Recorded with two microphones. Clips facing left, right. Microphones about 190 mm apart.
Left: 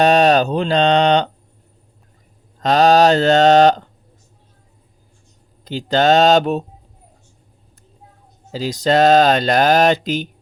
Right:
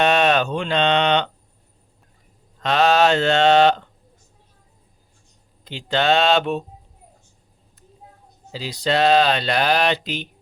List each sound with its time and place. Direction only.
0.0 s speech: 35° left (ahead or behind)
2.6 s speech: 40° left (ahead or behind)
5.6 s speech: 40° left (ahead or behind)
8.5 s speech: 45° left (ahead or behind)